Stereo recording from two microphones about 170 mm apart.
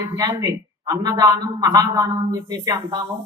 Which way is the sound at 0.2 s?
25° right (ahead or behind).